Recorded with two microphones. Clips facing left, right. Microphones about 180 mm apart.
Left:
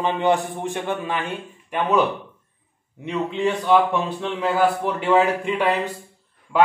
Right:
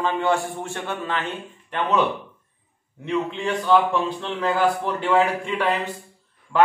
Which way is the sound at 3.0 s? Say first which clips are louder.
Left 2 dB; 15° left (ahead or behind).